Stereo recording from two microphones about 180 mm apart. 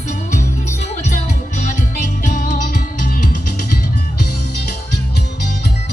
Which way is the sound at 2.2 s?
45° left (ahead or behind).